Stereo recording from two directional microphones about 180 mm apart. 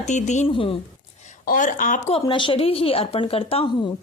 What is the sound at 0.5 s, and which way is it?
Speech, 30° left (ahead or behind).